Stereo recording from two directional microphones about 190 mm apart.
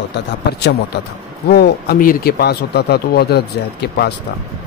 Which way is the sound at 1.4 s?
55° left (ahead or behind).